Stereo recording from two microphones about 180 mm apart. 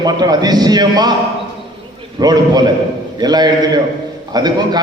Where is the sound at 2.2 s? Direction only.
20° right (ahead or behind).